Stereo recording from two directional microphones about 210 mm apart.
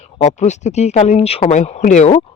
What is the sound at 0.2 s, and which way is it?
Speech, 35° left (ahead or behind).